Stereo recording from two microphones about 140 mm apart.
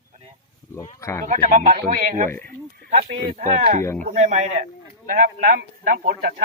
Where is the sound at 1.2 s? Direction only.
60° right (ahead or behind).